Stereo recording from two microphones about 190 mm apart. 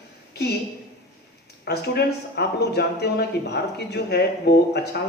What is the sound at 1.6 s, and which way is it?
Speech, 60° left (ahead or behind).